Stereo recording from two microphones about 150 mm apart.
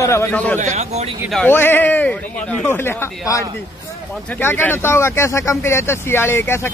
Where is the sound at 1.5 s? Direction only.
15° left (ahead or behind).